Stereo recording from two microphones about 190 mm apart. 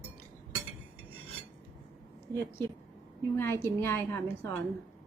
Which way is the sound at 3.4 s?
10° left (ahead or behind).